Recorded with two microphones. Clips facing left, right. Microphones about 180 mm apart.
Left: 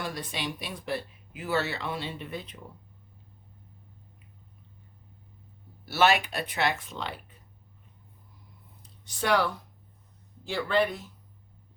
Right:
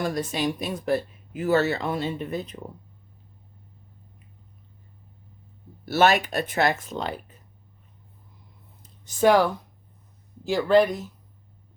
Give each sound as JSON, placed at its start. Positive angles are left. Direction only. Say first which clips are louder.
{"t": 0.0, "sound": "speech", "louder": "right 8 dB", "side_deg": -45}
{"t": 5.8, "sound": "speech", "louder": "right 4 dB", "side_deg": -45}
{"t": 8.8, "sound": "a sound", "louder": "right 12 dB", "side_deg": -45}
{"t": 10.4, "sound": "speech", "louder": "right 8 dB", "side_deg": -40}